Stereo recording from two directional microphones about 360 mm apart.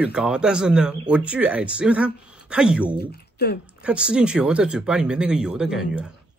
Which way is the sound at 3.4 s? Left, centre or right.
Left.